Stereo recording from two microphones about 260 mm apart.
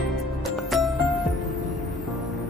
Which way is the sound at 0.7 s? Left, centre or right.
Centre.